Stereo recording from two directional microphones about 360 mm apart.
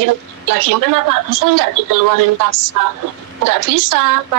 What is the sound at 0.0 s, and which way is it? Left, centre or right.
A woman's voice, right.